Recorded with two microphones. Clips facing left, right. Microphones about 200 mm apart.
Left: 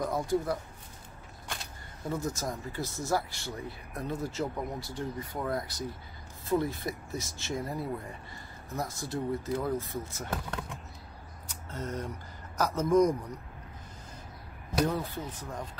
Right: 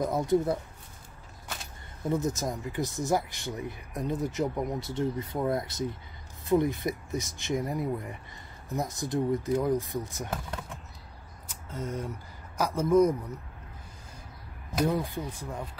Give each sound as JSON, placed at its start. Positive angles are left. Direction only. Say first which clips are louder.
{"t": 0.0, "sound": "speech", "louder": "right 4 dB", "side_deg": -25}
{"t": 2.0, "sound": "speech", "louder": "right 4 dB", "side_deg": -20}
{"t": 11.4, "sound": "a sound", "louder": "right 2 dB", "side_deg": -10}
{"t": 12.5, "sound": "speech", "louder": "right 2 dB", "side_deg": -10}
{"t": 14.9, "sound": "speech", "louder": "right 3 dB", "side_deg": -10}